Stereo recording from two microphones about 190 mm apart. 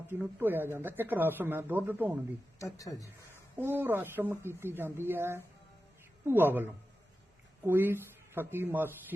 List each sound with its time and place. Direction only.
0.1 s speech: 10° right (ahead or behind)
2.6 s speech: 15° left (ahead or behind)
3.6 s speech: 10° right (ahead or behind)